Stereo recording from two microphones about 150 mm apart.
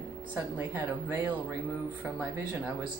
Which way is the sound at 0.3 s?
10° right (ahead or behind).